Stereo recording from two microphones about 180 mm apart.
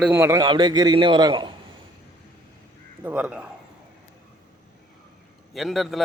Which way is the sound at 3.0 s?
10° right (ahead or behind).